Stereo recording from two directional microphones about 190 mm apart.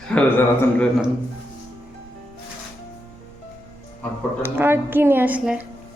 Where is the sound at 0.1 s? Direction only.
10° left (ahead or behind).